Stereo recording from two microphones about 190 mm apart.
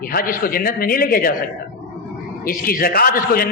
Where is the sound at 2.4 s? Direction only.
50° left (ahead or behind).